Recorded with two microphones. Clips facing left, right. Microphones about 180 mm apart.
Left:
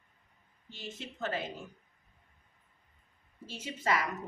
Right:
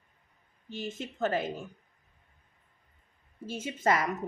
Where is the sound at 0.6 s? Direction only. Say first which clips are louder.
Right 7 dB; 50° right (ahead or behind).